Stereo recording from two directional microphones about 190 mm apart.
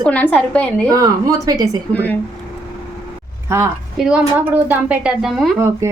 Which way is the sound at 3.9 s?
5° right (ahead or behind).